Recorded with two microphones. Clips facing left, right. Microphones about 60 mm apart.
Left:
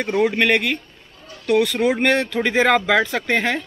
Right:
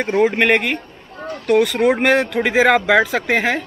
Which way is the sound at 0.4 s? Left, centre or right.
Centre.